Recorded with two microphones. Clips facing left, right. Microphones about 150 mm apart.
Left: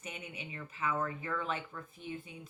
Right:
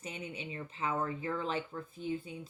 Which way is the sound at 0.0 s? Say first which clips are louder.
Right 3 dB; 30° right (ahead or behind).